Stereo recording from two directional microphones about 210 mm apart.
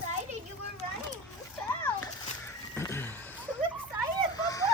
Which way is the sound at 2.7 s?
10° left (ahead or behind).